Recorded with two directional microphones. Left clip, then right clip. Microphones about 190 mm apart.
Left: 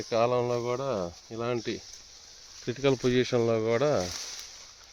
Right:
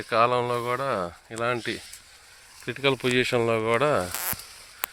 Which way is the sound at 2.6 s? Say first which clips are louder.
Right 2 dB; 30° left (ahead or behind).